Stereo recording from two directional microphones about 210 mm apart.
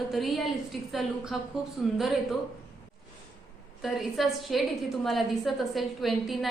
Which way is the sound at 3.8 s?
Centre (ahead or behind).